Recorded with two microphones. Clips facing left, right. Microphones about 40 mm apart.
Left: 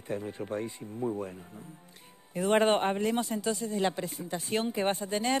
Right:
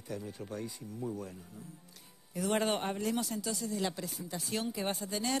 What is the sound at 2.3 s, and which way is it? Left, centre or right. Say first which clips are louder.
A man's voice: left 7 dB; left.